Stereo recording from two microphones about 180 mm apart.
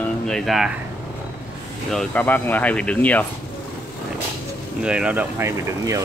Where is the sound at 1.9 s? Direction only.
Centre (ahead or behind).